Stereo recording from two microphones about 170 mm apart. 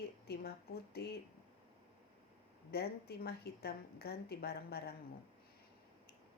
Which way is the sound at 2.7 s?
70° left (ahead or behind).